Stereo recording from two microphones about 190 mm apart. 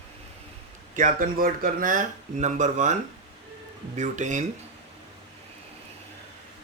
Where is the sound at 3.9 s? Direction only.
40° right (ahead or behind).